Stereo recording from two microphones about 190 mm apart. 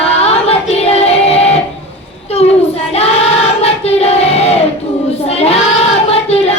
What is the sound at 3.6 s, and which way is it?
Child singing, 35° left (ahead or behind).